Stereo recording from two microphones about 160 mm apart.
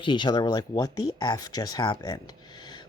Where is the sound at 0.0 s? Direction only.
30° left (ahead or behind).